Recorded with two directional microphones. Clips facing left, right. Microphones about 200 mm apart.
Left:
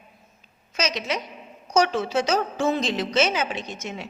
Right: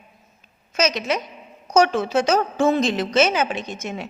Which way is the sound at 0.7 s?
50° right (ahead or behind).